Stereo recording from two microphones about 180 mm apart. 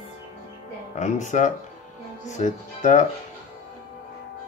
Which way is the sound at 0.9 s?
45° left (ahead or behind).